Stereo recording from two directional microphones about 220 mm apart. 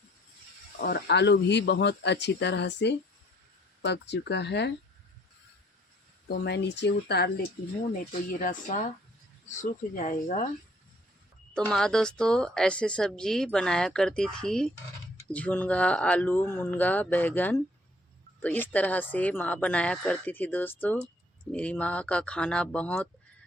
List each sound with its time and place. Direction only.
0.8 s speech: 45° left (ahead or behind)
6.2 s speech: 50° left (ahead or behind)
7.9 s speech: 40° left (ahead or behind)
11.5 s a woman's voice: 5° left (ahead or behind)